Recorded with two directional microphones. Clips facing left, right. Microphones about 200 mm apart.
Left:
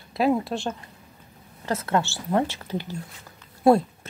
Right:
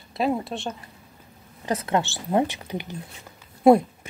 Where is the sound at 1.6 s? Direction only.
15° right (ahead or behind).